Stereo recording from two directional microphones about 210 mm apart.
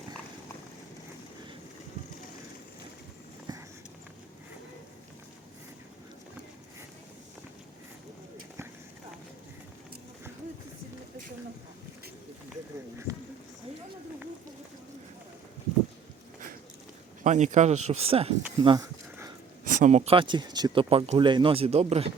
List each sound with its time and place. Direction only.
3.5 s a sound: 20° right (ahead or behind)
17.2 s speech: 35° right (ahead or behind); by 19.3 s 20° right (ahead or behind)
19.6 s speech: 35° right (ahead or behind)